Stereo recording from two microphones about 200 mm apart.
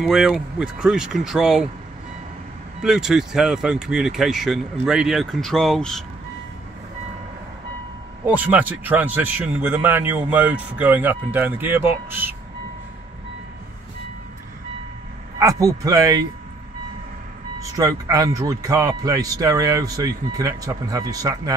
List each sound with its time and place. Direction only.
0.0 s speech: centre (ahead or behind)
2.8 s speech: centre (ahead or behind)
8.3 s speech: 10° right (ahead or behind)
15.3 s a man's voice: 15° right (ahead or behind)
17.6 s speech: 15° right (ahead or behind)